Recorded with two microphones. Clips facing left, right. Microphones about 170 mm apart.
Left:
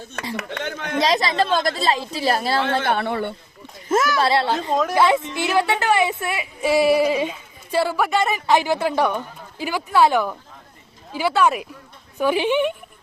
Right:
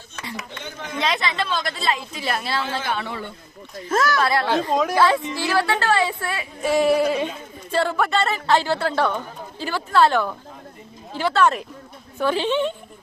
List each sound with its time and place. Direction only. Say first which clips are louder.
0.3 s speech: left 7 dB; 70° left (ahead or behind)
0.9 s speech: left 5 dB; 35° left (ahead or behind)
2.6 s a man's voice: left 5 dB; 60° left (ahead or behind)
3.8 s a child's voice: left 2 dB; 20° left (ahead or behind)
4.7 s speech: left 2 dB; centre (ahead or behind)
4.9 s speech: left 1 dB; 20° left (ahead or behind)